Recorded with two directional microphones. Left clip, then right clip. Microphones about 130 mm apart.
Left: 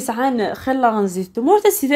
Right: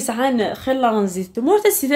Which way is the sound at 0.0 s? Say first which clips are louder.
Even; 20° left (ahead or behind).